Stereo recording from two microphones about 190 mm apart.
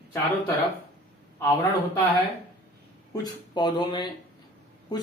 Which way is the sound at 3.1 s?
20° left (ahead or behind).